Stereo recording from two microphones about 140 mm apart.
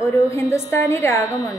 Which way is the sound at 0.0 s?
20° left (ahead or behind).